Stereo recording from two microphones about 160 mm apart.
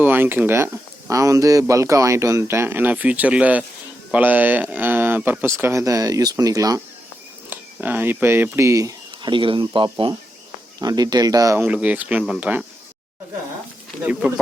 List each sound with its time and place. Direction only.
0.0 s speech: 10° right (ahead or behind)
11.6 s speech: 10° right (ahead or behind)
14.0 s speech: 10° right (ahead or behind)